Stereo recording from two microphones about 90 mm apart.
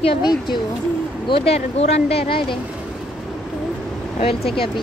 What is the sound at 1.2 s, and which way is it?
Speech, 90° left.